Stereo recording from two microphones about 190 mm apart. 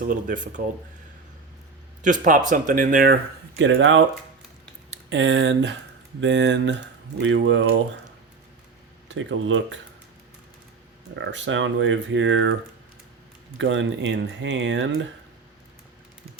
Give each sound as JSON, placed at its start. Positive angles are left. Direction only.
{"t": 0.0, "sound": "speech", "side_deg": -45}
{"t": 2.0, "sound": "speech", "side_deg": -45}
{"t": 3.6, "sound": "speech", "side_deg": -85}
{"t": 5.0, "sound": "speech", "side_deg": -75}
{"t": 7.2, "sound": "speech", "side_deg": -90}
{"t": 9.0, "sound": "speech", "side_deg": -85}
{"t": 11.1, "sound": "speech", "side_deg": -75}
{"t": 13.6, "sound": "speech", "side_deg": -75}